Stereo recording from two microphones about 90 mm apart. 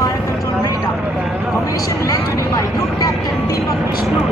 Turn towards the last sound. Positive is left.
turn(degrees=45)  # may be behind; listen again after turning